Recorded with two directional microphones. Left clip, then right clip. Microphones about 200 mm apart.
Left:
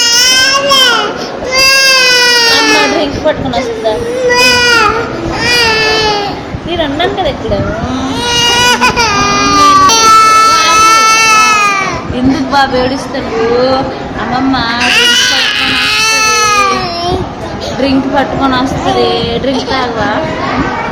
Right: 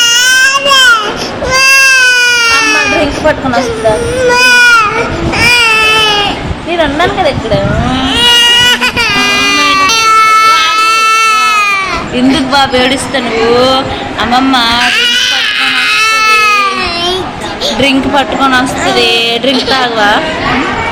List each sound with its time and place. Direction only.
0.0 s baby cry: 5° left (ahead or behind)
4.3 s baby cry: 5° left (ahead or behind)
8.2 s baby cry: 5° left (ahead or behind)
14.3 s a woman's voice: centre (ahead or behind)
14.8 s baby cry: 15° left (ahead or behind)
17.8 s a woman's voice: centre (ahead or behind)